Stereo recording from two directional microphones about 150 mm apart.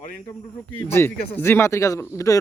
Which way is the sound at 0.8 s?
15° left (ahead or behind).